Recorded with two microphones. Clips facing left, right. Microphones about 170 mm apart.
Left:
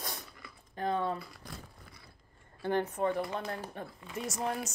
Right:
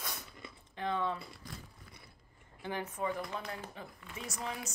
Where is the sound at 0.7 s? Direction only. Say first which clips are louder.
Left 3 dB; 45° left (ahead or behind).